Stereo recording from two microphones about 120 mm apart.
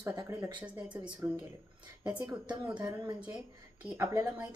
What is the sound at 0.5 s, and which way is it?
A woman's voice, 10° right (ahead or behind).